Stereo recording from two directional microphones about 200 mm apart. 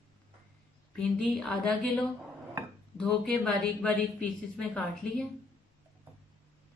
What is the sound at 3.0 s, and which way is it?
Speech, 5° left (ahead or behind).